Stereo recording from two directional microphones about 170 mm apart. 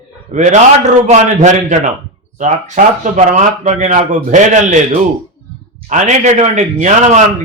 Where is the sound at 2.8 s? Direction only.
50° right (ahead or behind).